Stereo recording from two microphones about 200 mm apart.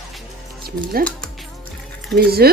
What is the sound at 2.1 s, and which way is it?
Speech, 50° right (ahead or behind).